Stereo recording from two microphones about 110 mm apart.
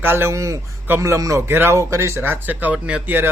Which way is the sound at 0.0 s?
20° right (ahead or behind).